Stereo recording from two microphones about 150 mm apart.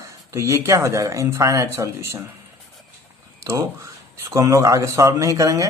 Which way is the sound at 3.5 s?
25° right (ahead or behind).